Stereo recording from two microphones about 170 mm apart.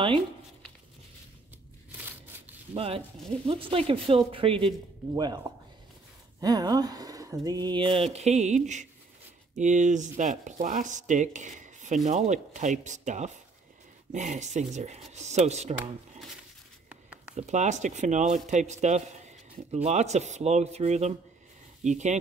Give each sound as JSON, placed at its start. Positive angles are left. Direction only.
{"t": 2.7, "sound": "speech", "side_deg": -35}
{"t": 6.4, "sound": "speech", "side_deg": -20}
{"t": 16.9, "sound": "a sound", "side_deg": -10}
{"t": 17.4, "sound": "speech", "side_deg": -45}